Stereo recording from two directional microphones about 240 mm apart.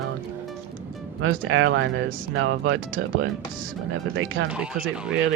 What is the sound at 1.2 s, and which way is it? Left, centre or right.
Speech, right.